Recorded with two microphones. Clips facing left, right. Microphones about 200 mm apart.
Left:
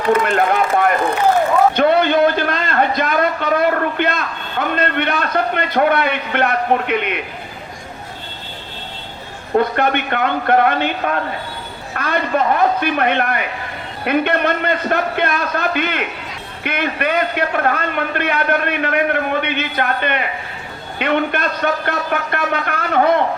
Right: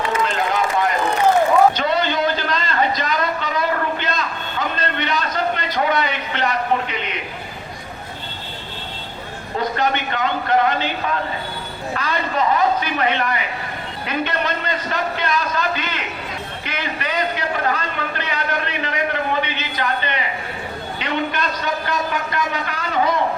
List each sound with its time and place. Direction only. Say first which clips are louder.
0.1 s run: left 10 dB; 55° left (ahead or behind)
1.7 s a sound: left 7 dB; 55° left (ahead or behind)
9.6 s a man's voice: left 5 dB; 55° left (ahead or behind)